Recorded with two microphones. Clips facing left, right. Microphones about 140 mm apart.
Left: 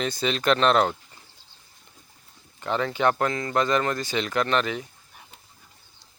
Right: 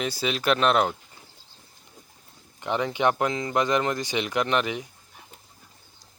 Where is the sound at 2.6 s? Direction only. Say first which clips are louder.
Even; 15° right (ahead or behind).